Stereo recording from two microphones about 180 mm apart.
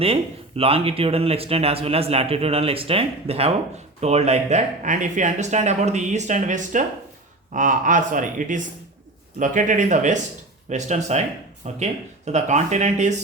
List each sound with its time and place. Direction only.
0.0 s a man's voice: 30° right (ahead or behind)